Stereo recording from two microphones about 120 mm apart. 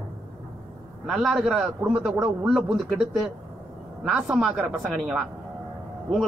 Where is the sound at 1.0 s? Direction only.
Centre (ahead or behind).